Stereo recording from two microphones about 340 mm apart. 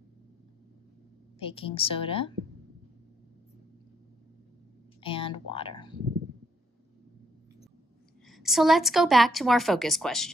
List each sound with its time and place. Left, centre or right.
1.4 s a woman's voice: centre
5.0 s speech: centre
8.3 s a woman's voice: centre